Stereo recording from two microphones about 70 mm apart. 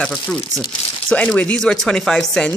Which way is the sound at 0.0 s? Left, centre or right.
Centre.